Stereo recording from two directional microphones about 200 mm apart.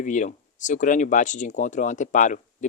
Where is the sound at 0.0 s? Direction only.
40° left (ahead or behind).